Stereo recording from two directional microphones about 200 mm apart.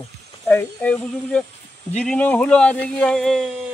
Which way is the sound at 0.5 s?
5° left (ahead or behind).